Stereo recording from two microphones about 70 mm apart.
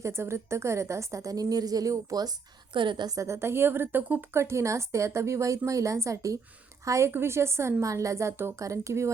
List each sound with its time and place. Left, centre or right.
0.0 s a woman's voice: right
3.2 s a woman's voice: right
7.1 s a woman's voice: right